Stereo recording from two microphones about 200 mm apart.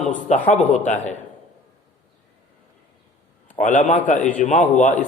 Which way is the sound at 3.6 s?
40° left (ahead or behind).